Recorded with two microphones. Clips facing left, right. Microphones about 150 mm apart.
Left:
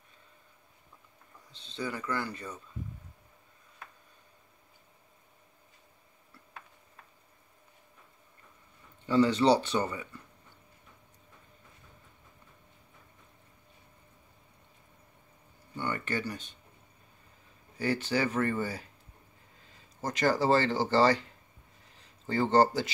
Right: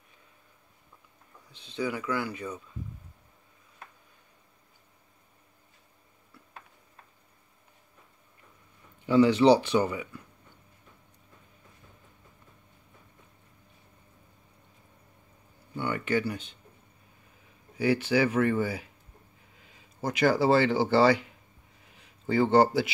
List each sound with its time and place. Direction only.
1.8 s speech: 10° right (ahead or behind)
9.0 s speech: 10° right (ahead or behind)
15.7 s speech: 10° right (ahead or behind)
17.7 s speech: 10° right (ahead or behind)